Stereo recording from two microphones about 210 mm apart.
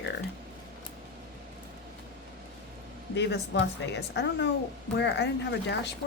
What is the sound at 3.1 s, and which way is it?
Speech, 55° left (ahead or behind).